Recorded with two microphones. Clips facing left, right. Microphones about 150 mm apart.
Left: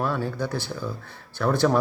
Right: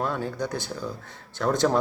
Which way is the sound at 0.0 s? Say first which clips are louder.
Left 1 dB; 20° right (ahead or behind).